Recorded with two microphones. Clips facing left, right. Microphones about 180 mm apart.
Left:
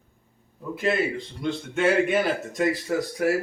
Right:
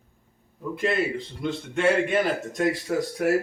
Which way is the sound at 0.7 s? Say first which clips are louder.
Even; centre (ahead or behind).